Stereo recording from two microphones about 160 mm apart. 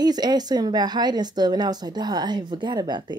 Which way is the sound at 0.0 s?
25° right (ahead or behind).